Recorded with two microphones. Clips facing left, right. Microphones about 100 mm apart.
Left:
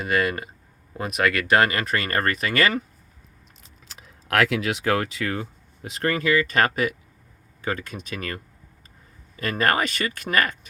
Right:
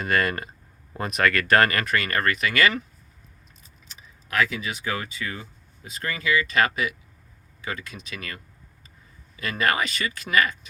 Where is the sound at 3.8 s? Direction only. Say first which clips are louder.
Left 9 dB; 90° left; by 8.4 s 45° left (ahead or behind).